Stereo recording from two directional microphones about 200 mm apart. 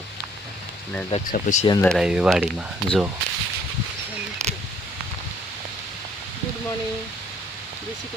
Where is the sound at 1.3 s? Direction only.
40° left (ahead or behind).